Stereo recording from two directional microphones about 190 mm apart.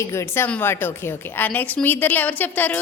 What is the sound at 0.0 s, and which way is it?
A woman's voice, 15° left (ahead or behind).